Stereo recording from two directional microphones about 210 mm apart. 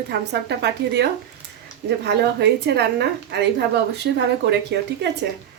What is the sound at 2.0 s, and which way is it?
A woman's voice, 55° right (ahead or behind).